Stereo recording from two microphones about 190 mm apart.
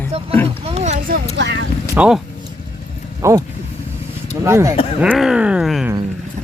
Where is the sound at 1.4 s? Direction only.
70° right (ahead or behind).